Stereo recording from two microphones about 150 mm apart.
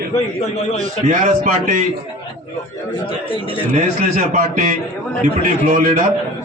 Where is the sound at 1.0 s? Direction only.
55° right (ahead or behind).